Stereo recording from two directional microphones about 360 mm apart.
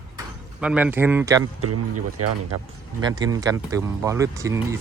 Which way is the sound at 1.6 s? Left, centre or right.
Right.